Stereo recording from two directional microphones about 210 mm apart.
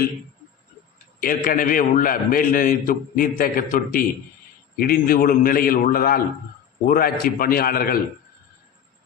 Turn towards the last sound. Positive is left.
turn(degrees=45)  # may be behind; listen again after turning